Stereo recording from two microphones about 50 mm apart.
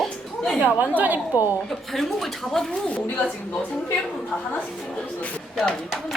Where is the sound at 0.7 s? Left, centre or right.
Right.